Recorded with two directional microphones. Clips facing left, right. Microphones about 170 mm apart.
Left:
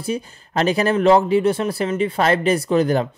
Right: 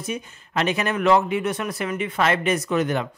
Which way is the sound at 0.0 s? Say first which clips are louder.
Left 5 dB; 35° left (ahead or behind).